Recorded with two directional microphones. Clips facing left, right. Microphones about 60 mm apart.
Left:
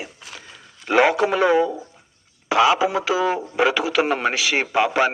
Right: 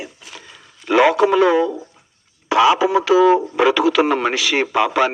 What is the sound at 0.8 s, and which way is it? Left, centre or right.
A man's voice, centre.